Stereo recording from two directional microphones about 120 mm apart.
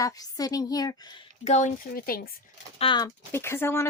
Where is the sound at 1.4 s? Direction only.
80° left.